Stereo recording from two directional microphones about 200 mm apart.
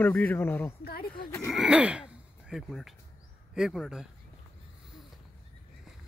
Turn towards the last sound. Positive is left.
turn(degrees=0)  # may be behind; listen again after turning